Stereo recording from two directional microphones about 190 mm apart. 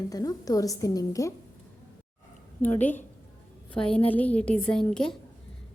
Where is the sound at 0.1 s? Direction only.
20° left (ahead or behind).